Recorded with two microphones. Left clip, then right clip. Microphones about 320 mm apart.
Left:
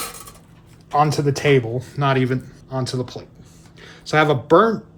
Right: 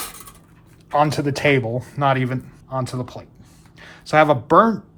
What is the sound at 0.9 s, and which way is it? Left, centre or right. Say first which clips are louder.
Speech: left 1 dB; right.